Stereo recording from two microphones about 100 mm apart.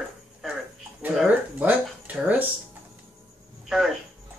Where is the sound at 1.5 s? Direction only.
15° right (ahead or behind).